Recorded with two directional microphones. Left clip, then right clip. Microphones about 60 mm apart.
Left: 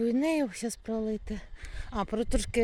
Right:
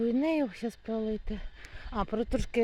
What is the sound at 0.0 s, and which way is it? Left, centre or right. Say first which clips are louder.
Speech: left 1 dB; left.